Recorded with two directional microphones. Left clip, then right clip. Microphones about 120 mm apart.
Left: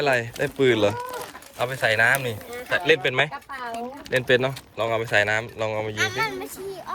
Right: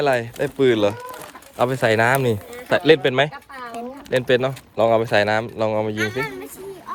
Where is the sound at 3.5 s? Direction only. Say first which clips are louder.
Left 1 dB; 50° left (ahead or behind).